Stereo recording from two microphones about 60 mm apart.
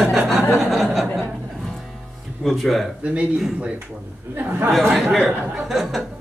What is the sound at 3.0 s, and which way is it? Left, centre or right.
Speech, right.